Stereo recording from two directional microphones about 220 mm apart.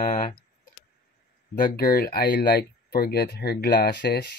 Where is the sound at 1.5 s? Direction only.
40° left (ahead or behind).